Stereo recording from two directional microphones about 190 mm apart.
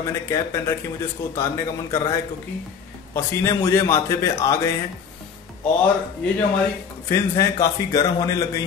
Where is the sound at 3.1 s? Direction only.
15° left (ahead or behind).